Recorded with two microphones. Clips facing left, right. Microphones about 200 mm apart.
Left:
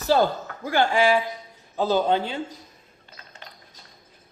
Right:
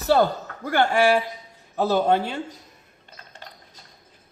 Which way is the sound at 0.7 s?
60° right (ahead or behind).